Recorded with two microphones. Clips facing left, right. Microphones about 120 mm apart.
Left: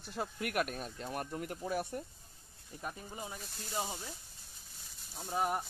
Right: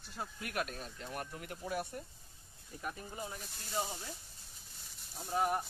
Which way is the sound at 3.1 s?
15° left (ahead or behind).